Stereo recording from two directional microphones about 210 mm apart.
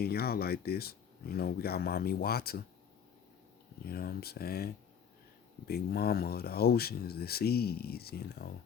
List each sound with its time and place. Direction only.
0.0 s speech: 45° left (ahead or behind)
3.8 s speech: 45° left (ahead or behind)